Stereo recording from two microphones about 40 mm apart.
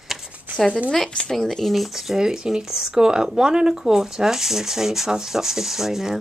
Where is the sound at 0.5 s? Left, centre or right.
Right.